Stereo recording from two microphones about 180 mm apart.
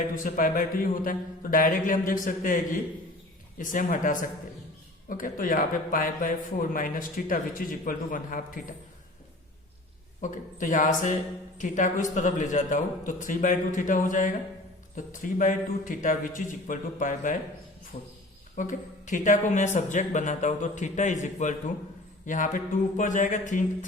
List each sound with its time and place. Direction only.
0.1 s a man's voice: 50° left (ahead or behind)
10.2 s a man's voice: 45° left (ahead or behind)
17.9 s speech: 35° left (ahead or behind)
18.5 s a man's voice: 45° left (ahead or behind)